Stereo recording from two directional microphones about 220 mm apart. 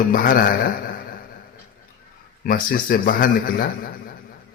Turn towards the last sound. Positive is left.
turn(degrees=40)  # may be behind; listen again after turning